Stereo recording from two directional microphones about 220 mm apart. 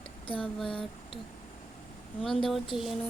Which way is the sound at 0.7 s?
25° left (ahead or behind).